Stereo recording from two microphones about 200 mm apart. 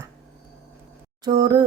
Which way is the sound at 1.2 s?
20° right (ahead or behind).